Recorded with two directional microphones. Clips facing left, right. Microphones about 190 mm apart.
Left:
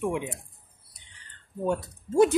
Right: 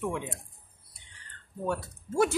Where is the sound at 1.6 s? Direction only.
20° left (ahead or behind).